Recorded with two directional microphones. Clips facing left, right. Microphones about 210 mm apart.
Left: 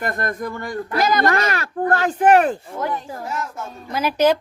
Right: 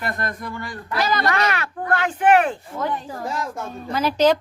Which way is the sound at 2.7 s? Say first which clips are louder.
Left 1 dB; 10° left (ahead or behind).